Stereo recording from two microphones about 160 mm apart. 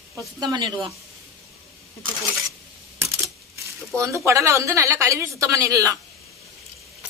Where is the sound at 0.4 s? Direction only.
25° right (ahead or behind).